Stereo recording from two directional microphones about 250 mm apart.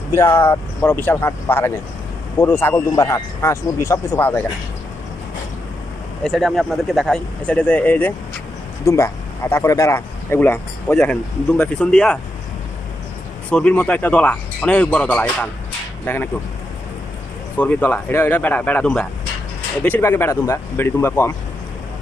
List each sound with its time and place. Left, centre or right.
0.1 s speech: centre
6.2 s a man's voice: centre
13.5 s a man's voice: centre
17.6 s speech: centre